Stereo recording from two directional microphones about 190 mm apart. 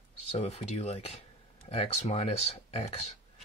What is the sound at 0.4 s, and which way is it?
Speech, 35° left (ahead or behind).